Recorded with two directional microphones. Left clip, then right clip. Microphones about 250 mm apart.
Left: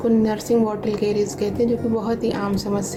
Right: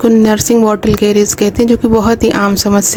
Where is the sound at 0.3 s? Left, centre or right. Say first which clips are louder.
Right 10 dB; right.